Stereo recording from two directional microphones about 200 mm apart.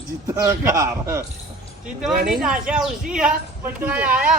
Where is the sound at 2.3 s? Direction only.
5° right (ahead or behind).